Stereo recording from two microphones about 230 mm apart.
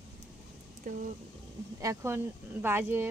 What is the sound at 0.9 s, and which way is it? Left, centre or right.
Speech, right.